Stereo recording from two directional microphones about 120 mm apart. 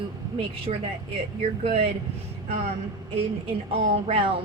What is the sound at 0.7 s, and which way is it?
Speech, 75° right (ahead or behind).